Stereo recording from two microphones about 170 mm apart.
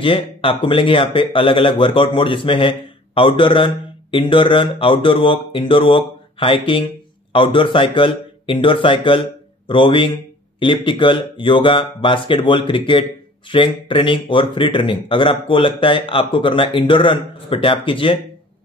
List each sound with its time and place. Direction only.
0.0 s speech: 30° left (ahead or behind)